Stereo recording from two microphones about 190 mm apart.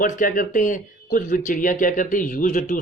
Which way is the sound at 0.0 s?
45° left (ahead or behind).